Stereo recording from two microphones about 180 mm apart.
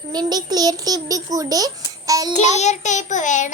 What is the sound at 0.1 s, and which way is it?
A child's voice, 20° right (ahead or behind).